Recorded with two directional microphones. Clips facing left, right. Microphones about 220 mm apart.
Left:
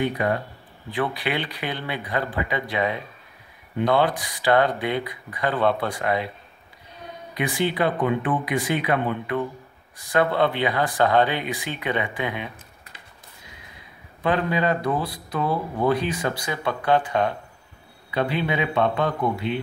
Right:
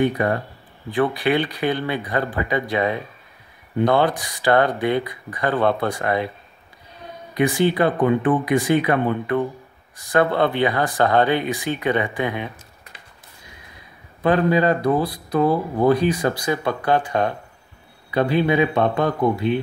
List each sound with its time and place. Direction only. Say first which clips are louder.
0.0 s speech: right 4 dB; 50° right (ahead or behind)
7.3 s speech: right 6 dB; 45° right (ahead or behind)
14.2 s speech: right 5 dB; 40° right (ahead or behind)